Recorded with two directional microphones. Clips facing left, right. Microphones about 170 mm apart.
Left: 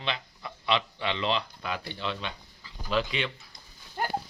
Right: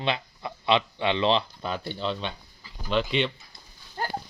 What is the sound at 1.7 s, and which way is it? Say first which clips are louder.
Speech: right 3 dB; centre (ahead or behind).